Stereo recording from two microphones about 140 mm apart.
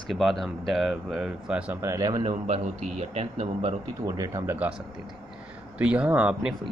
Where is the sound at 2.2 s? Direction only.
55° right (ahead or behind).